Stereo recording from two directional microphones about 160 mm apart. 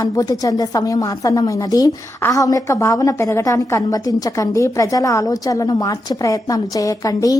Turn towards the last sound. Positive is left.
turn(degrees=20)  # may be behind; listen again after turning